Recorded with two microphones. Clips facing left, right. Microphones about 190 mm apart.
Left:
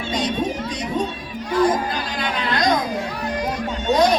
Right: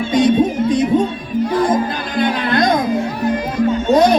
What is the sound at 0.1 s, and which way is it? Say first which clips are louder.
Music: right 10 dB; 50° right (ahead or behind).